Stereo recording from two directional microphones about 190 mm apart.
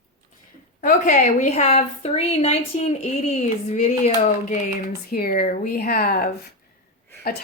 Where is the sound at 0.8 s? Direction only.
40° left (ahead or behind).